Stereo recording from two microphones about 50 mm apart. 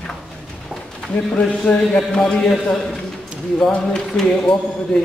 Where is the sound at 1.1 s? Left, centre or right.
Left.